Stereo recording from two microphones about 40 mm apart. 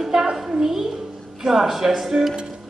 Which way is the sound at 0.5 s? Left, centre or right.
Centre.